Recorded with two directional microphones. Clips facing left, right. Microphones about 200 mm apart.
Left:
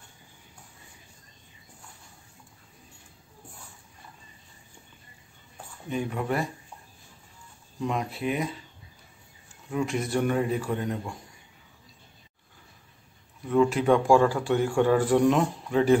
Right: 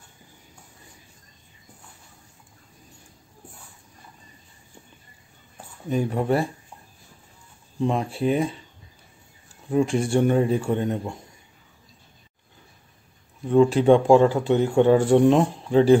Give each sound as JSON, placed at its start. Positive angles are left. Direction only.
{"t": 5.9, "sound": "speech", "side_deg": -35}
{"t": 7.8, "sound": "speech", "side_deg": -30}
{"t": 9.7, "sound": "speech", "side_deg": -30}
{"t": 13.5, "sound": "speech", "side_deg": -30}